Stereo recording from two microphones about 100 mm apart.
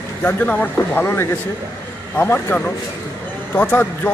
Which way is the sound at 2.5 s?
15° left (ahead or behind).